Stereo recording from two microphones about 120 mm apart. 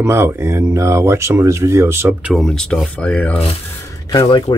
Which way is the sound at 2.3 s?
5° left (ahead or behind).